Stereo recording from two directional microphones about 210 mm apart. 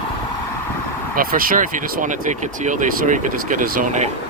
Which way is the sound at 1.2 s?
40° right (ahead or behind).